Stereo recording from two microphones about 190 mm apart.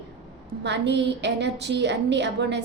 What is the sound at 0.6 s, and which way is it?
A woman's voice, 65° right (ahead or behind).